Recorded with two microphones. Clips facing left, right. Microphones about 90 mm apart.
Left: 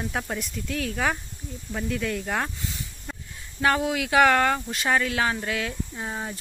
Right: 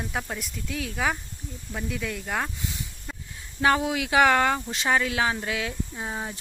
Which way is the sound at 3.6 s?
20° right (ahead or behind).